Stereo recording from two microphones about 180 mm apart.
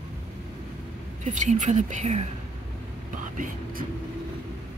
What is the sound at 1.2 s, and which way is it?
Speech, 40° right (ahead or behind).